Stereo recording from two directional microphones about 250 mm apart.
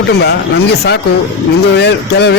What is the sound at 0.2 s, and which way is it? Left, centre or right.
Speech, left.